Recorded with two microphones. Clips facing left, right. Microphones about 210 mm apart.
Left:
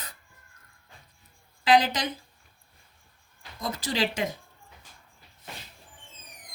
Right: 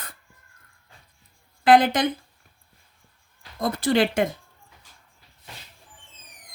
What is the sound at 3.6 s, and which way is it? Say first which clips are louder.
Speech: right 8 dB; 55° right (ahead or behind).